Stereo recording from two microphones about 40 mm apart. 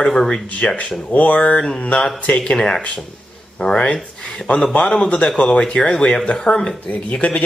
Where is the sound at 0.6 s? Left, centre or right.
Left.